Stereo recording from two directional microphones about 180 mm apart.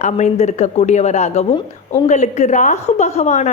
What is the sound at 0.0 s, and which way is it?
A woman's voice, 40° left (ahead or behind).